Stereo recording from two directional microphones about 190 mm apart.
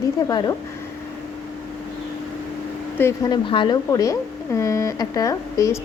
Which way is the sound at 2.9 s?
15° left (ahead or behind).